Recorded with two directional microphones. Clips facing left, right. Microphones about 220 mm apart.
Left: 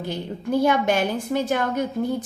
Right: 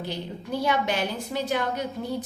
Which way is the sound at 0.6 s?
50° left (ahead or behind).